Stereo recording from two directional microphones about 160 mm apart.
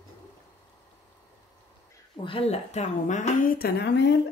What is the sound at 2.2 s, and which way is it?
Speech, 35° left (ahead or behind).